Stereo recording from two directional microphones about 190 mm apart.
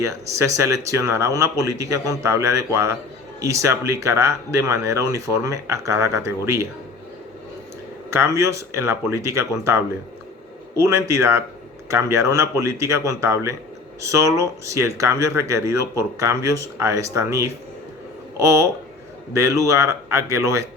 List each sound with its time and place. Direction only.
0.0 s speech: 15° right (ahead or behind)
8.1 s speech: 15° right (ahead or behind)